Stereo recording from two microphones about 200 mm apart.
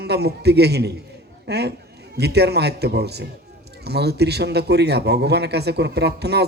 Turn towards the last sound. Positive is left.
turn(degrees=-55)  # may be behind; listen again after turning